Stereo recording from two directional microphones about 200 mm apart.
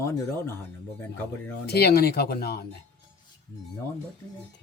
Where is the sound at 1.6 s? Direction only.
55° left (ahead or behind).